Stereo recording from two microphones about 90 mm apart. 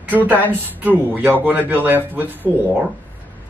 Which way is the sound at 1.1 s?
20° right (ahead or behind).